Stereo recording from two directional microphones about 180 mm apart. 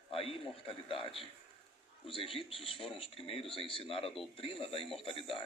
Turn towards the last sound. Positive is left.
turn(degrees=30)  # may be behind; listen again after turning